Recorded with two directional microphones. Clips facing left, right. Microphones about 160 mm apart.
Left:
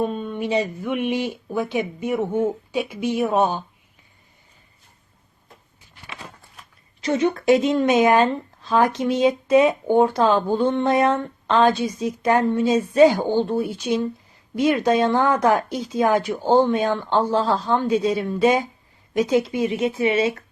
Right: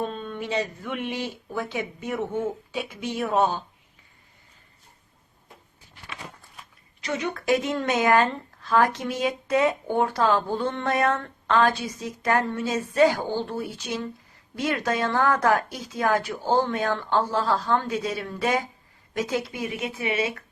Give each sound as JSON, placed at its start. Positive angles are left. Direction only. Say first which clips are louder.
{"t": 0.0, "sound": "speech", "louder": "left 6 dB", "side_deg": 10}
{"t": 7.0, "sound": "speech", "louder": "left 8 dB", "side_deg": 30}